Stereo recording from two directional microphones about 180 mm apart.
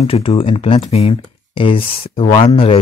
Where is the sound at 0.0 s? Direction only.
35° left (ahead or behind).